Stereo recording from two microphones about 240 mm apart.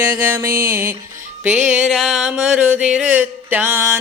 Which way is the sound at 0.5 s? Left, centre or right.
Right.